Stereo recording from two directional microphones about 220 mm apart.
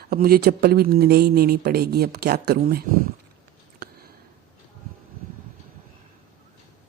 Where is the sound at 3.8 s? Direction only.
45° right (ahead or behind).